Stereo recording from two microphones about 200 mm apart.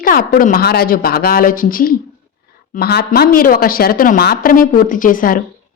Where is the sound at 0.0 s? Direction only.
45° left (ahead or behind).